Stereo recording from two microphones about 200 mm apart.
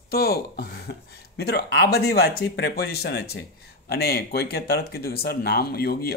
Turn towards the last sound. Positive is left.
turn(degrees=50)  # may be behind; listen again after turning